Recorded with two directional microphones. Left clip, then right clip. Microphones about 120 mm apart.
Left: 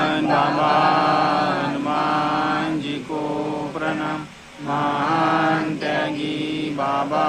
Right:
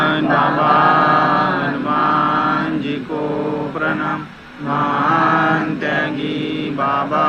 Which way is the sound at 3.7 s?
25° left (ahead or behind).